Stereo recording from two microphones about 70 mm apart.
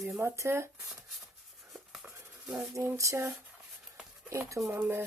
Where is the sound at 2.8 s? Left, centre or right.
Right.